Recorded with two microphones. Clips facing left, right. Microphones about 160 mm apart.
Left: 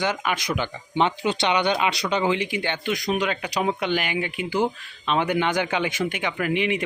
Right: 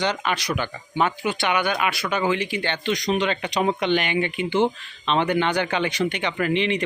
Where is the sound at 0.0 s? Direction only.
10° left (ahead or behind).